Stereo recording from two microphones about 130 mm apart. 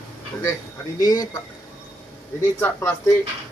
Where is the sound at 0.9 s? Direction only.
25° left (ahead or behind).